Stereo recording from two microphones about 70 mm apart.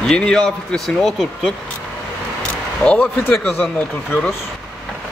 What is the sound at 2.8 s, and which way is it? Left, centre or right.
Speech, centre.